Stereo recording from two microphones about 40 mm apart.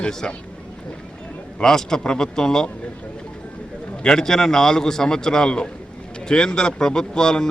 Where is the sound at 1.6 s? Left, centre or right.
Centre.